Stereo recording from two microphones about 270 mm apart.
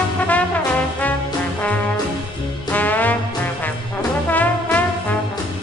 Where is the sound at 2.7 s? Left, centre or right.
Centre.